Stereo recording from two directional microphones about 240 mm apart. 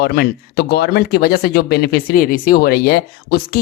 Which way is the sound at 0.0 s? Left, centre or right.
Left.